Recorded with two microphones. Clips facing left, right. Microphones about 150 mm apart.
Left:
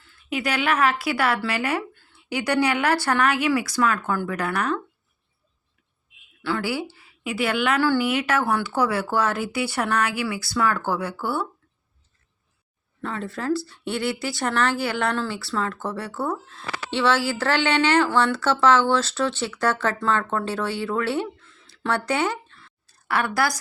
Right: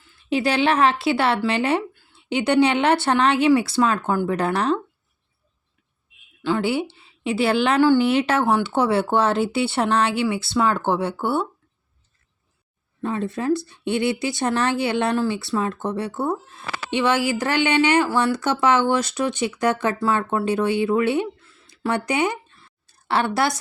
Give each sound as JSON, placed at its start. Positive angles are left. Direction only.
{"t": 0.3, "sound": "speech", "side_deg": -30}
{"t": 6.4, "sound": "a woman's voice", "side_deg": -20}
{"t": 7.8, "sound": "speech", "side_deg": -20}
{"t": 8.0, "sound": "speech", "side_deg": -30}
{"t": 13.0, "sound": "speech", "side_deg": -20}
{"t": 23.0, "sound": "speech", "side_deg": -25}